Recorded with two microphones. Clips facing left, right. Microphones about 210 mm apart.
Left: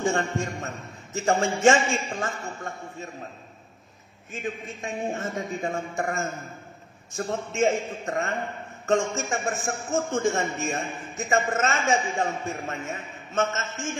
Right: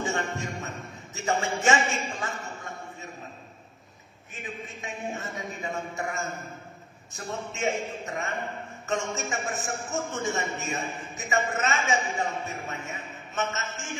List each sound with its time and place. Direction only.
0.0 s a man's voice: 50° left (ahead or behind)
4.4 s a man's voice: 50° left (ahead or behind)
9.3 s a man's voice: 50° left (ahead or behind)